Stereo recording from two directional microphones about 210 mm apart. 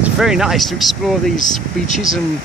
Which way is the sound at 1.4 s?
35° left (ahead or behind).